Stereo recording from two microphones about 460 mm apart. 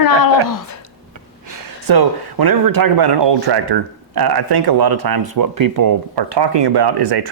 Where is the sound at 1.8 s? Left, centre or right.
Right.